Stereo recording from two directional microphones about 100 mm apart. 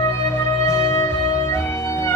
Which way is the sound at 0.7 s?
25° left (ahead or behind).